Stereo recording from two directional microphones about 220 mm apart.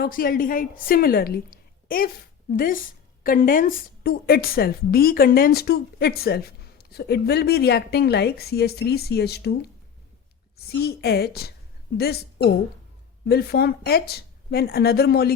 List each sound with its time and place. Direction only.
0.0 s a woman's voice: 40° left (ahead or behind)
10.7 s a woman's voice: 45° left (ahead or behind)